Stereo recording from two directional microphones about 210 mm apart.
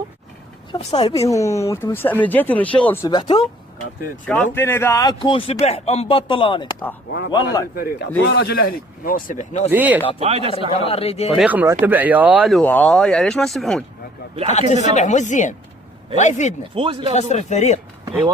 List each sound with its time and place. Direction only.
0.7 s speech: 30° left (ahead or behind)
1.3 s speech: 15° left (ahead or behind)
4.5 s speech: 10° left (ahead or behind)
7.1 s a man's voice: 55° left (ahead or behind); by 9.6 s 35° left (ahead or behind)
9.6 s speech: 10° right (ahead or behind)
10.2 s a man's voice: 30° right (ahead or behind)
10.7 s speech: 25° left (ahead or behind)
11.3 s speech: 5° right (ahead or behind)
14.4 s speech: 35° left (ahead or behind)
16.7 s a man's voice: 25° right (ahead or behind)
17.1 s speech: 30° left (ahead or behind)